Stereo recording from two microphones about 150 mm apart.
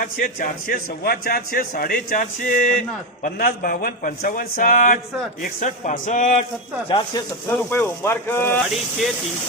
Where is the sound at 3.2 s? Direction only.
85° left; by 6.5 s 55° left (ahead or behind).